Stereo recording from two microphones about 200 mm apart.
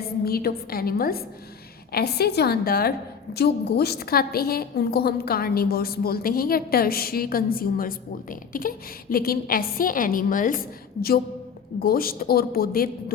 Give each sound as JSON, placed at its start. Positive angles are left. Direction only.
{"t": 0.3, "sound": "a woman's voice", "side_deg": 50}
{"t": 11.8, "sound": "a woman's voice", "side_deg": 45}